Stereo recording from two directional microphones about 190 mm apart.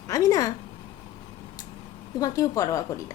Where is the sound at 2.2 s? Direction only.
15° left (ahead or behind).